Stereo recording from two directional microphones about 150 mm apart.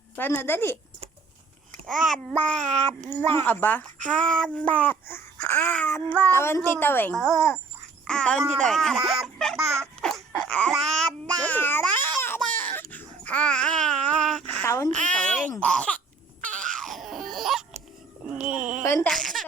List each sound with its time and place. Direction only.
0.2 s speech: 15° left (ahead or behind)
2.6 s child singing: 55° right (ahead or behind)
3.2 s a child's voice: 15° left (ahead or behind)
9.8 s a sound: 5° left (ahead or behind)
11.3 s babbling: 10° left (ahead or behind)
11.8 s baby cry: 10° left (ahead or behind)
14.6 s speech: 20° left (ahead or behind)
15.1 s speech: 5° left (ahead or behind)
16.4 s baby cry: 5° left (ahead or behind)
18.3 s a sound: 10° right (ahead or behind)
18.8 s speech: 20° left (ahead or behind)
19.0 s a sound: 5° left (ahead or behind)